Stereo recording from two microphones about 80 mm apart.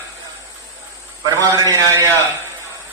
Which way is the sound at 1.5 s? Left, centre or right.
Right.